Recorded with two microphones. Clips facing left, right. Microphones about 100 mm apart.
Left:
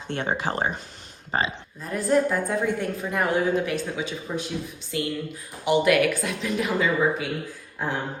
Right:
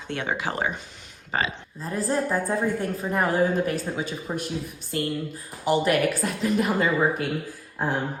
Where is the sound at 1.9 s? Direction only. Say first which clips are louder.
Left 3 dB; 30° right (ahead or behind).